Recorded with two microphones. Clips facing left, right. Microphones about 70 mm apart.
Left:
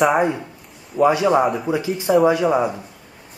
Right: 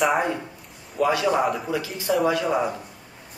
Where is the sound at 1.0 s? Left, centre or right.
Left.